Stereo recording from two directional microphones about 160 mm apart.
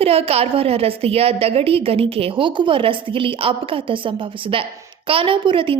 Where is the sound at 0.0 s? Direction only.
40° right (ahead or behind).